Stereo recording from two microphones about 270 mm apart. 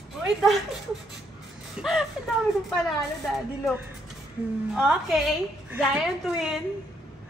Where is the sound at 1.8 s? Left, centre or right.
Centre.